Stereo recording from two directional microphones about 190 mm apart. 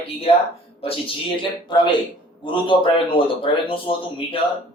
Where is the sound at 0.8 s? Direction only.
30° left (ahead or behind).